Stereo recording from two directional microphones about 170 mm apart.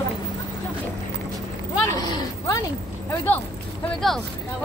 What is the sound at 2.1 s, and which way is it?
Speech, 20° left (ahead or behind).